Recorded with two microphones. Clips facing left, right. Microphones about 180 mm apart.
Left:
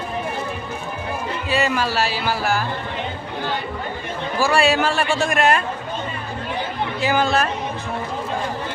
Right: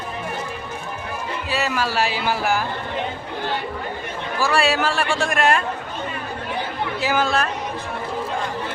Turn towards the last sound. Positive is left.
turn(degrees=0)  # may be behind; listen again after turning